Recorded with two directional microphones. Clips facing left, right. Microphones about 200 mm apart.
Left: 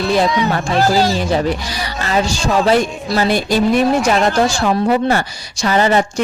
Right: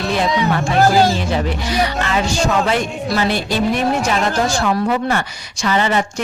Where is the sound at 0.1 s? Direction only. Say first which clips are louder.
Left 1 dB; 40° left (ahead or behind).